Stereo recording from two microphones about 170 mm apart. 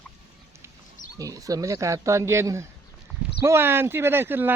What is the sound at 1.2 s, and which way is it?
Speech, 20° right (ahead or behind).